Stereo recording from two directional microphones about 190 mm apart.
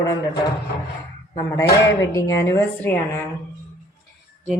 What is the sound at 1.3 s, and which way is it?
Speech, 20° left (ahead or behind).